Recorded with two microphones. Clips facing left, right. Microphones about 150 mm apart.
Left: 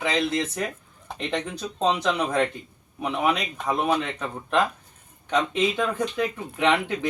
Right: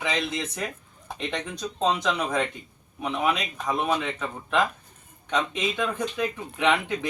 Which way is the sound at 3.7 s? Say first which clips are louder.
Left 2 dB; 10° left (ahead or behind).